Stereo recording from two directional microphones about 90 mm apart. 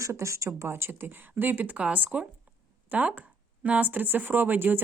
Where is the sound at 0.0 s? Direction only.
35° right (ahead or behind).